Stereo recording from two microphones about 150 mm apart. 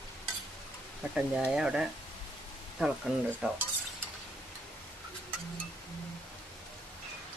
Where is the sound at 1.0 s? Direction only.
10° right (ahead or behind).